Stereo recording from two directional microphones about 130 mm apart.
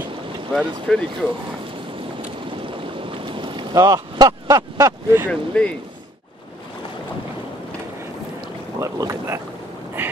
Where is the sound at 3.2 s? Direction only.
40° right (ahead or behind).